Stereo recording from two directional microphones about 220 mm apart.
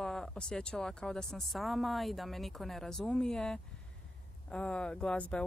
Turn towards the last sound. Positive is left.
turn(degrees=5)  # may be behind; listen again after turning